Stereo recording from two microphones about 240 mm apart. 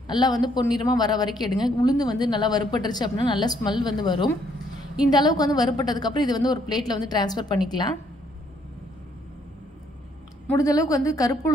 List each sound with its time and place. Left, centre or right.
0.1 s a woman's voice: centre
10.4 s a woman's voice: centre